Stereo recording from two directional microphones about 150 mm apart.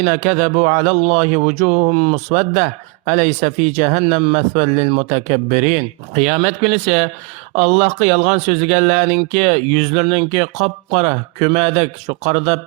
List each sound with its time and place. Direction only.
0.0 s speech: 55° right (ahead or behind)